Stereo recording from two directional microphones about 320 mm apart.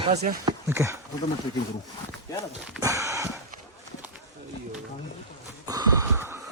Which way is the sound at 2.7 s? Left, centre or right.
Centre.